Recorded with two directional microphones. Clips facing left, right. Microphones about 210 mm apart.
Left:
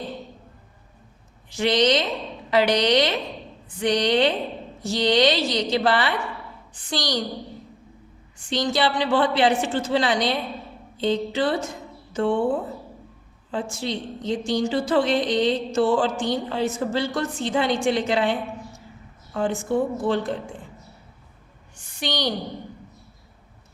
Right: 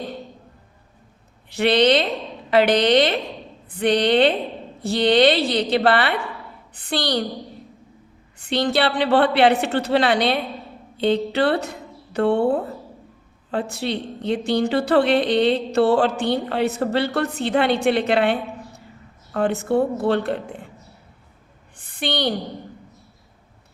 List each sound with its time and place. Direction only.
1.5 s a woman's voice: 60° right (ahead or behind)
8.4 s a woman's voice: 60° right (ahead or behind)
21.9 s a woman's voice: 55° right (ahead or behind)